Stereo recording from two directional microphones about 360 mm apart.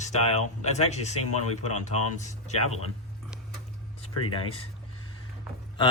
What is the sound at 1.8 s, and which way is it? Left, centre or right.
Speech, centre.